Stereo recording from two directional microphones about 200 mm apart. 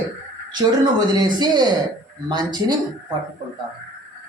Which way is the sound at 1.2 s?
20° right (ahead or behind).